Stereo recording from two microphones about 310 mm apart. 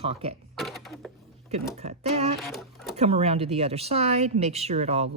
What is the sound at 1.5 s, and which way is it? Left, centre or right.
Speech, centre.